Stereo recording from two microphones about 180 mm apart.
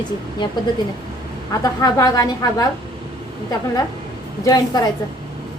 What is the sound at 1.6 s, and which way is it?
A woman's voice, 20° left (ahead or behind).